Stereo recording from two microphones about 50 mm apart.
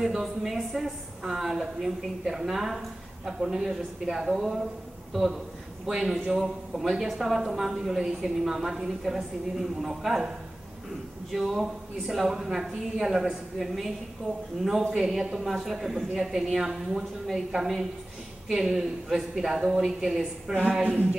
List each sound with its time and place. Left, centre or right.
0.0 s a woman's voice: centre
11.3 s a woman's voice: centre
20.8 s a sound: right